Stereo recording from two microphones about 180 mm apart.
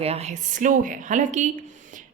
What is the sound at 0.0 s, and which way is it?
Speech, 35° right (ahead or behind).